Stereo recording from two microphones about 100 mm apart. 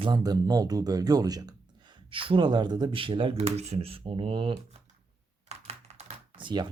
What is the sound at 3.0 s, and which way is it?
Speech, 60° right (ahead or behind).